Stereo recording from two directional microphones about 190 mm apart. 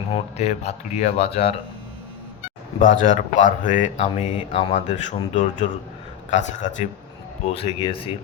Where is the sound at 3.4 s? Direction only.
40° left (ahead or behind).